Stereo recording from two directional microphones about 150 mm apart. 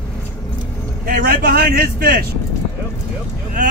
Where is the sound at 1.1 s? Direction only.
85° right.